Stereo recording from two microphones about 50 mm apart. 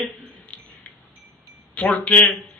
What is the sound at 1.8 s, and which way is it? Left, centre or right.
Speech, left.